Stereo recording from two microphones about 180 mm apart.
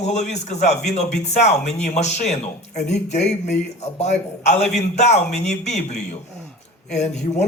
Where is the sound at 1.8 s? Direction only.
40° left (ahead or behind).